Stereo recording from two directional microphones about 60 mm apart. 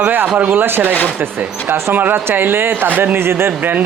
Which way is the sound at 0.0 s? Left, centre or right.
Right.